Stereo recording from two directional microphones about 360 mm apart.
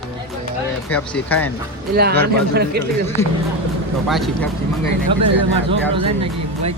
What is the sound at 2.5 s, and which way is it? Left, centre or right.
Speech, right.